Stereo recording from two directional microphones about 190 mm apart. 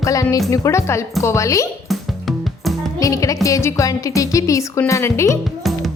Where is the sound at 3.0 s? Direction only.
15° left (ahead or behind).